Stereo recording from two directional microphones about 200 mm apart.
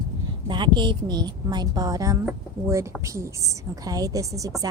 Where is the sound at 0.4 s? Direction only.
25° right (ahead or behind).